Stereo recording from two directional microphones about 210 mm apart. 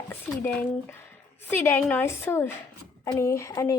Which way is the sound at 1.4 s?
10° left (ahead or behind).